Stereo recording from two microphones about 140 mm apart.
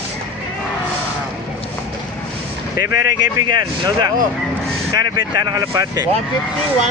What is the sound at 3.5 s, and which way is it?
Speech, 30° right (ahead or behind).